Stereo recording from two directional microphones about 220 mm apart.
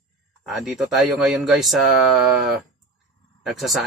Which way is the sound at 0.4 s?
Centre (ahead or behind).